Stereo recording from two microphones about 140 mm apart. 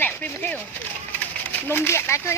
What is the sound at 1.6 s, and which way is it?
Speech, 15° left (ahead or behind).